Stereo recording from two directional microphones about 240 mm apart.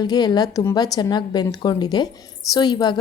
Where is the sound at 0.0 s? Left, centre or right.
Centre.